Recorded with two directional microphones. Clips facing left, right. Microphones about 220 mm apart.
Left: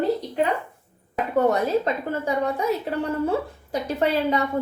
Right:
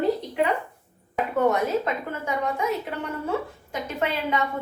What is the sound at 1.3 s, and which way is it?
A woman's voice, 35° left (ahead or behind).